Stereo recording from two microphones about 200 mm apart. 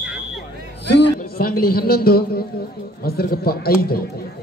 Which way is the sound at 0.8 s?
55° left (ahead or behind).